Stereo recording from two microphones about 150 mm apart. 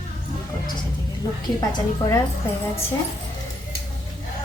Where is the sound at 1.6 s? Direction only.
25° left (ahead or behind).